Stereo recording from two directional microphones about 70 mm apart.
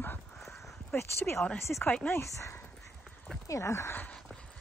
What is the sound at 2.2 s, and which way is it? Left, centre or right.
Speech, left.